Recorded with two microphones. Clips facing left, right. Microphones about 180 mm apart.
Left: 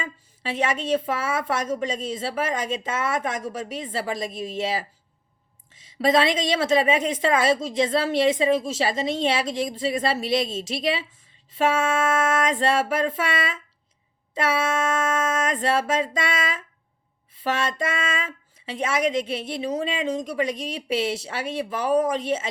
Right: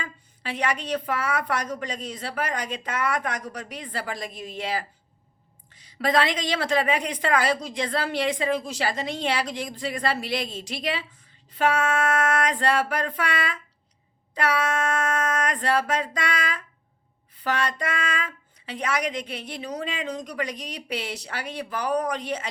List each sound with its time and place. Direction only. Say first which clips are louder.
0.0 s a woman's voice: left 3 dB; 25° left (ahead or behind)